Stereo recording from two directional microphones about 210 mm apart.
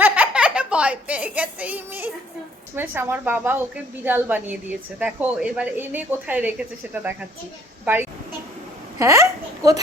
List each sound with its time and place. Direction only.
0.0 s a sound: 5° right (ahead or behind)
2.7 s a woman's voice: 10° right (ahead or behind)
9.0 s a woman's voice: 15° right (ahead or behind)